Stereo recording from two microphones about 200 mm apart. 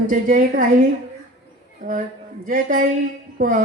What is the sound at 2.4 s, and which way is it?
Speech, 40° right (ahead or behind).